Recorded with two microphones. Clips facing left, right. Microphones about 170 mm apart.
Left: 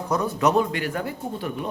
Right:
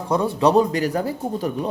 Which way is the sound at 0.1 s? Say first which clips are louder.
Right 4 dB; 30° right (ahead or behind).